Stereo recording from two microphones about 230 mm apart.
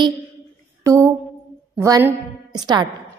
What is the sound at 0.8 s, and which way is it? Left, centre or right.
A woman's voice, centre.